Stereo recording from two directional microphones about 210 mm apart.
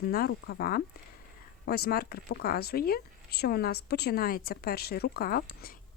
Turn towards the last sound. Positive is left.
turn(degrees=45)  # may be behind; listen again after turning